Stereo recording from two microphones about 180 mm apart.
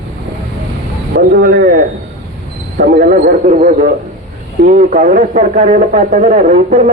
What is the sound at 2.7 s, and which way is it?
Speech, 55° right (ahead or behind).